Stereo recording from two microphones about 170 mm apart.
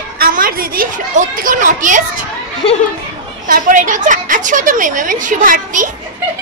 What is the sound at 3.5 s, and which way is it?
A woman's voice, 50° right (ahead or behind).